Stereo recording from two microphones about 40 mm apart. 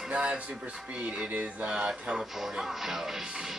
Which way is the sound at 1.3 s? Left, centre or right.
Right.